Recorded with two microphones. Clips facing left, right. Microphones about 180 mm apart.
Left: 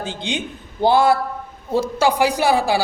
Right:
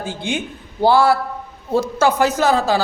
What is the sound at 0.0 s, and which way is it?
A man's voice, 20° left (ahead or behind).